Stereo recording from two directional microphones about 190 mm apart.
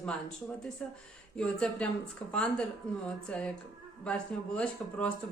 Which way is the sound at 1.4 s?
5° left (ahead or behind).